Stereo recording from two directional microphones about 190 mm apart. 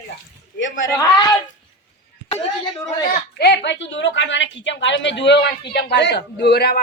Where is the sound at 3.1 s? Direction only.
60° left (ahead or behind).